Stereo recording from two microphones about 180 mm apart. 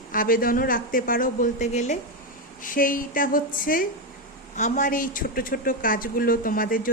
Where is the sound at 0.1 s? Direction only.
50° left (ahead or behind).